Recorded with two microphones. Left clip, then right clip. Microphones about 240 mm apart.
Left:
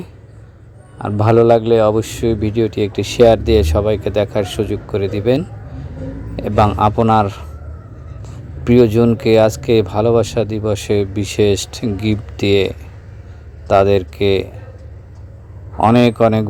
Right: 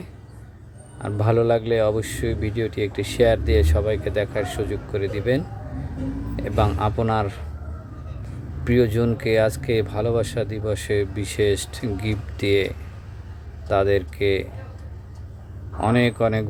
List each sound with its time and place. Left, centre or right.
0.9 s a man's voice: left
8.6 s a man's voice: left
15.8 s a man's voice: left